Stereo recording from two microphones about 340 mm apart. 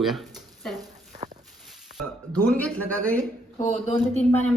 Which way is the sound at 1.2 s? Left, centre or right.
Centre.